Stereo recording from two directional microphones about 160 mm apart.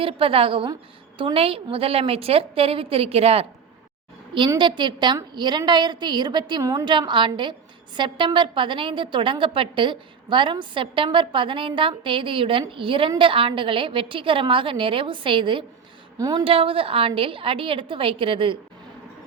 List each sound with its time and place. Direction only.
0.0 s a woman's voice: 35° right (ahead or behind)
16.4 s a woman's voice: 35° right (ahead or behind)